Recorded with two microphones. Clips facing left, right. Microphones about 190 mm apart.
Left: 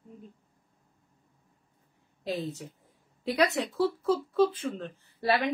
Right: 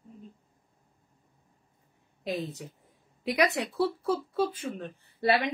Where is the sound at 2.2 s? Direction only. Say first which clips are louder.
Even; 15° right (ahead or behind).